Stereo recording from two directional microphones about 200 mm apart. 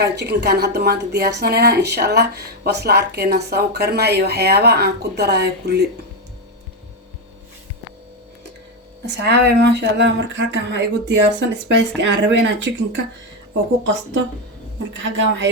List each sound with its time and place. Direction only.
0.0 s speech: 55° right (ahead or behind)
9.0 s speech: 60° right (ahead or behind)